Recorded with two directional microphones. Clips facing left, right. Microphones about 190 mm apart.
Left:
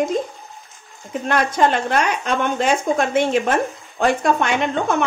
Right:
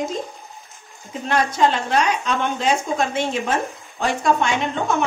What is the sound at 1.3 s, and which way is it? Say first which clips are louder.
A woman's voice: left 1 dB; 55° left (ahead or behind).